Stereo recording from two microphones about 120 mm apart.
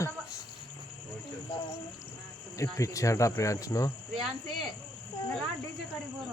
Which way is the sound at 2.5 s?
25° left (ahead or behind).